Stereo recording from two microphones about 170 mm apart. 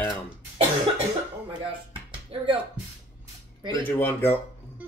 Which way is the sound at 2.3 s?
30° right (ahead or behind).